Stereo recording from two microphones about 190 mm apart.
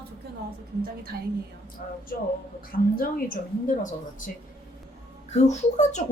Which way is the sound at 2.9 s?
50° left (ahead or behind).